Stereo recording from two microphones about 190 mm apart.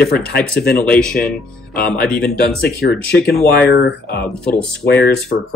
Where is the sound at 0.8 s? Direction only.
5° left (ahead or behind).